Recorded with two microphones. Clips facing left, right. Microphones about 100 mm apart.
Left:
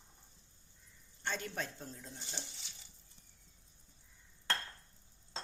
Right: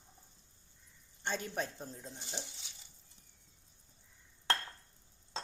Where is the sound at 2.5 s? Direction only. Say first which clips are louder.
Even; centre (ahead or behind).